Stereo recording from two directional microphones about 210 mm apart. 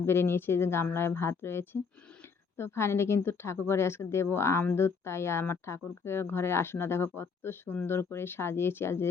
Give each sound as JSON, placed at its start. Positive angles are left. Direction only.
{"t": 0.0, "sound": "speech", "side_deg": 10}